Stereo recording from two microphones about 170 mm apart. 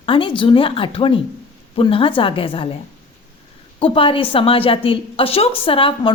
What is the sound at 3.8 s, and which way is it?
A woman's voice, 30° left (ahead or behind).